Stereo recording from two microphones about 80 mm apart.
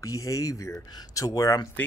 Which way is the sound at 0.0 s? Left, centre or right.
Left.